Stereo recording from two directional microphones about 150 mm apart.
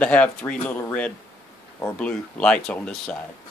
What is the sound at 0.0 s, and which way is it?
Speech, 10° left (ahead or behind).